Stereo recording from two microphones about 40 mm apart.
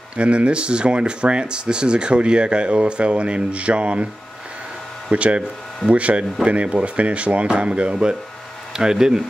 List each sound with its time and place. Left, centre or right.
0.2 s speech: right
5.1 s speech: right; by 9.2 s centre